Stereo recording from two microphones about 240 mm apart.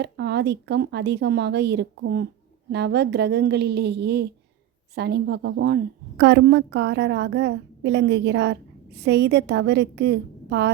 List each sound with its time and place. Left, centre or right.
0.0 s a woman's voice: right